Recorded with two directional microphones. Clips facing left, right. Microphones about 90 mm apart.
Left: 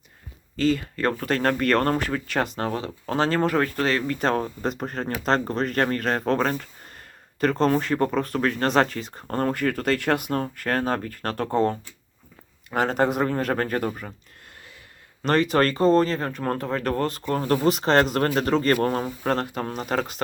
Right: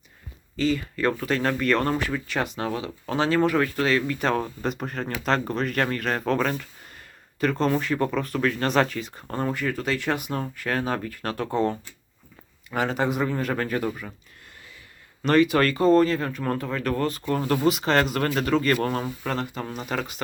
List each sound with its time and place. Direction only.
0.5 s speech: 45° left (ahead or behind)
9.3 s speech: 55° left (ahead or behind)
15.2 s speech: 35° left (ahead or behind)